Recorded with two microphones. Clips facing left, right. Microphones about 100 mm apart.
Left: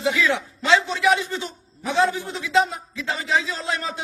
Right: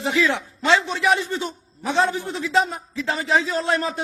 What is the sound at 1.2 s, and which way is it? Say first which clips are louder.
A man's voice: right 2 dB; 40° right (ahead or behind).